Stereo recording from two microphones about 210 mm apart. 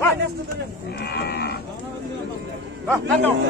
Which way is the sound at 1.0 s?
50° left (ahead or behind).